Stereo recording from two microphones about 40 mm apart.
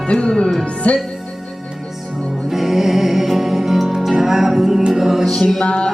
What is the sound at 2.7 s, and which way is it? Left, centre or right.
Music, centre.